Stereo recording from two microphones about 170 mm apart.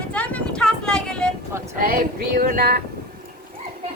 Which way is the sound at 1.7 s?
60° right (ahead or behind).